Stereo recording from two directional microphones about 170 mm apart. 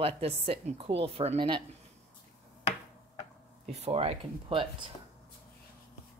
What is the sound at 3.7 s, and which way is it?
Speech, 35° right (ahead or behind).